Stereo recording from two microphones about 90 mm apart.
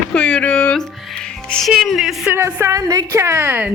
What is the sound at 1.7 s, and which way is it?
Speech, 5° right (ahead or behind).